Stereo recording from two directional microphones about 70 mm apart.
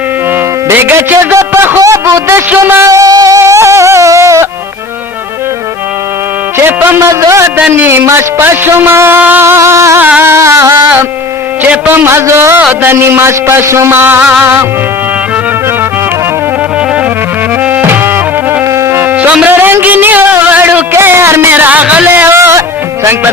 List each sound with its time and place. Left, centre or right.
0.7 s a man's voice: right
1.8 s a sound: right
2.6 s a man's voice: right
2.9 s music: right
6.6 s music: right
7.0 s a man's voice: right
10.2 s music: right
11.9 s a man's voice: right
17.6 s music: centre
17.8 s music: right
19.1 s a sound: centre
19.5 s music: right
20.9 s a man's voice: right
22.0 s a man's voice: right